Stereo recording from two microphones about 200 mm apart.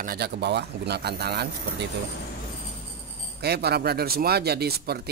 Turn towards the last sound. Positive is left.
turn(degrees=-50)  # may be behind; listen again after turning